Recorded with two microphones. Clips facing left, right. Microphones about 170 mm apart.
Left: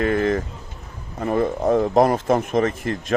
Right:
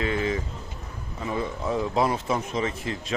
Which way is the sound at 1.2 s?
50° left (ahead or behind).